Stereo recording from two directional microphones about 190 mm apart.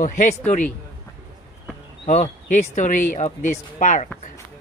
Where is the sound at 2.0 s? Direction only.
40° left (ahead or behind).